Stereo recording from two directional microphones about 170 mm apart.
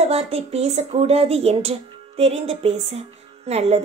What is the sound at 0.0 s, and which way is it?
A woman's voice, 35° right (ahead or behind).